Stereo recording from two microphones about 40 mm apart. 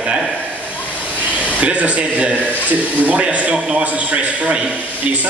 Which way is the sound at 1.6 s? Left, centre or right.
Right.